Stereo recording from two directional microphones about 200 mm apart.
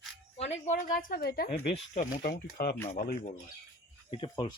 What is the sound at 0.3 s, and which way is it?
A woman's voice, 35° left (ahead or behind).